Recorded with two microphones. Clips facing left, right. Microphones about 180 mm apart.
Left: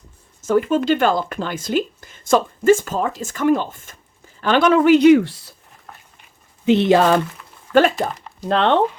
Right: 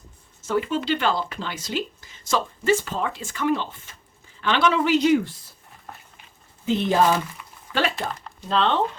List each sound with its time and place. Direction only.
0.4 s speech: 45° left (ahead or behind); by 5.5 s 75° left (ahead or behind)
6.7 s speech: 75° left (ahead or behind)
7.7 s speech: 50° left (ahead or behind)
8.4 s speech: 60° left (ahead or behind)